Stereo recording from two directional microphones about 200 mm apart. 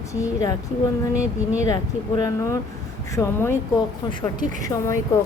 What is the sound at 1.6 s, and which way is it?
A woman's voice, 20° left (ahead or behind).